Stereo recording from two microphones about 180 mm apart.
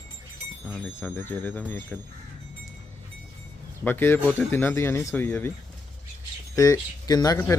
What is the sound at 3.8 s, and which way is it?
Speech, 10° left (ahead or behind).